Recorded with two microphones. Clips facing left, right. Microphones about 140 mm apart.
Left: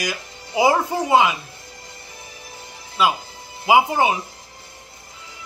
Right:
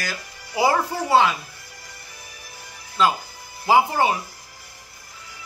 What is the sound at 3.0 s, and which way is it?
A man's voice, 10° left (ahead or behind).